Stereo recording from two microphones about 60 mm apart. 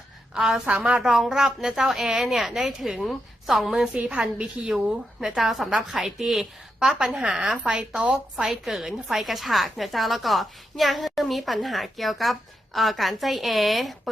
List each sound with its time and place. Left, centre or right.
0.3 s a woman's voice: centre
1.0 s a woman's voice: centre
4.1 s a woman's voice: centre
7.3 s a woman's voice: right; by 14.1 s centre